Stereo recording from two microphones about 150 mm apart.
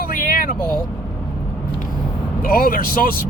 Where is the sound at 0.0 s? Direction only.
70° left (ahead or behind).